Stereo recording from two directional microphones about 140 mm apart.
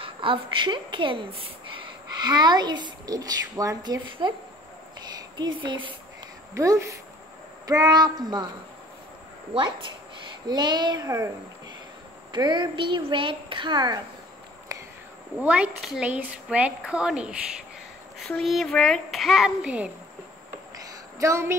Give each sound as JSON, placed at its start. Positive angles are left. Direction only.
{"t": 0.0, "sound": "a woman's voice", "side_deg": -40}
{"t": 5.4, "sound": "a woman's voice", "side_deg": -35}
{"t": 6.5, "sound": "speech", "side_deg": -25}
{"t": 9.5, "sound": "a woman's voice", "side_deg": -35}
{"t": 12.3, "sound": "a woman's voice", "side_deg": -30}
{"t": 15.3, "sound": "a woman's voice", "side_deg": -10}
{"t": 18.4, "sound": "a child's voice", "side_deg": 0}
{"t": 20.7, "sound": "a sound", "side_deg": -20}